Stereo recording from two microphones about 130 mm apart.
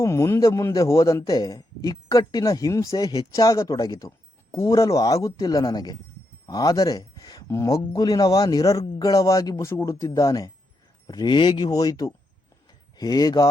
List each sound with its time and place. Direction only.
0.0 s a man's voice: 20° left (ahead or behind)